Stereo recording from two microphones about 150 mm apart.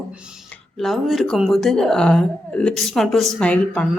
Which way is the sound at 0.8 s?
Centre (ahead or behind).